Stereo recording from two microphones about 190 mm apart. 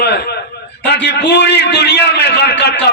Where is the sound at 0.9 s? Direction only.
60° left (ahead or behind).